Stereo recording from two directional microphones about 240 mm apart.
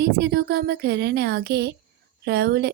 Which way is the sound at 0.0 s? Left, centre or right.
Right.